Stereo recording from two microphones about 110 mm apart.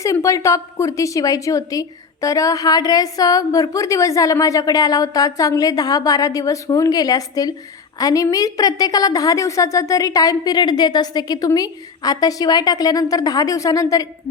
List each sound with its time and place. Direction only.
0.0 s a woman's voice: 30° left (ahead or behind)